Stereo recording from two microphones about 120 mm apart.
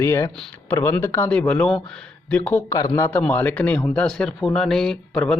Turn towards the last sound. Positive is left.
turn(degrees=5)  # may be behind; listen again after turning